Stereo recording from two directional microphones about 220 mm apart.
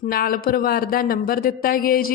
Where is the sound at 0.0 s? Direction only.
40° left (ahead or behind).